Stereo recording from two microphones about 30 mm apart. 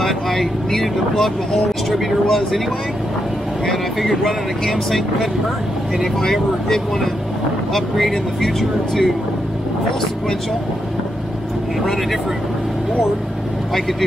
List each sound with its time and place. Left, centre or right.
0.0 s speech: centre
4.0 s speech: centre
6.2 s speech: centre
7.9 s speech: centre